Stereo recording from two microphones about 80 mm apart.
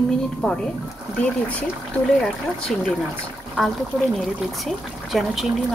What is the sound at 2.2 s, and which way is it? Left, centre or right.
Speech, centre.